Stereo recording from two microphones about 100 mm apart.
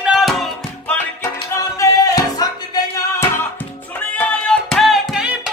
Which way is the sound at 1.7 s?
35° left (ahead or behind).